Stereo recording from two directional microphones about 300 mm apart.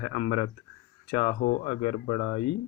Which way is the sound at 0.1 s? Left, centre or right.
Centre.